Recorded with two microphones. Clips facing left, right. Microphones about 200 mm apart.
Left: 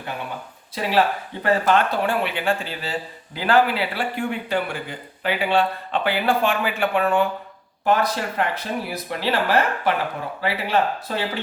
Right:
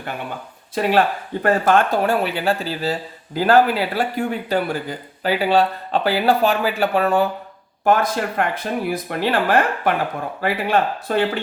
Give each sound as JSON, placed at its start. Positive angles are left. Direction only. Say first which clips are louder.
{"t": 0.8, "sound": "speech", "louder": "right 3 dB", "side_deg": -50}
{"t": 7.9, "sound": "speech", "louder": "right 3 dB", "side_deg": -50}